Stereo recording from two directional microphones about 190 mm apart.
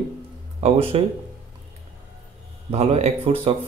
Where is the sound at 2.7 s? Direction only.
35° right (ahead or behind).